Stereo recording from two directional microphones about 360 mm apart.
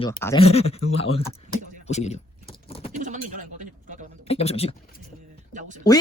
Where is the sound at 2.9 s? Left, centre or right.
Right.